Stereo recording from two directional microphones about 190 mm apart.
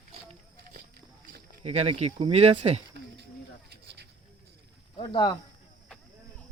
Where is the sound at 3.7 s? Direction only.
60° right (ahead or behind).